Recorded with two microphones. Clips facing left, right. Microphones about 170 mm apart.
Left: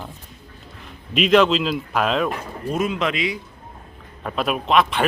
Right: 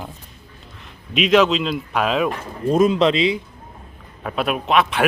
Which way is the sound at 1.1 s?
Centre (ahead or behind).